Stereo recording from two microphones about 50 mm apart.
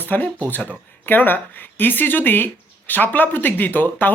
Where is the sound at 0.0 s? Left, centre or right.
Left.